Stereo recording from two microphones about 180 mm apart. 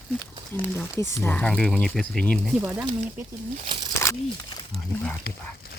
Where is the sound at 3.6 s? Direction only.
25° right (ahead or behind).